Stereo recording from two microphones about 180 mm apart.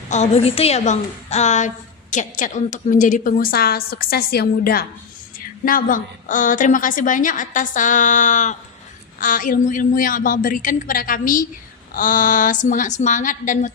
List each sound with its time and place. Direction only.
0.1 s a woman's voice: 35° left (ahead or behind)